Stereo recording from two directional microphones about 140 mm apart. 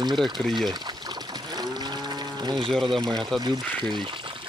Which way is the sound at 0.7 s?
30° right (ahead or behind).